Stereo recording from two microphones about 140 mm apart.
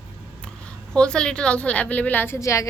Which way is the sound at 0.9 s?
5° left (ahead or behind).